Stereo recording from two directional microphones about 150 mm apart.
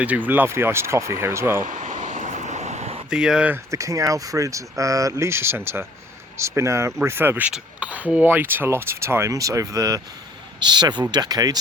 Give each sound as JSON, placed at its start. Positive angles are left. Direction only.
{"t": 0.0, "sound": "speech", "side_deg": -10}
{"t": 1.6, "sound": "vehicle", "side_deg": -60}
{"t": 3.1, "sound": "speech", "side_deg": -5}